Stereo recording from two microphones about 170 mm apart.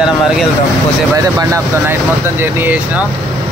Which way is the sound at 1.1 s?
20° right (ahead or behind).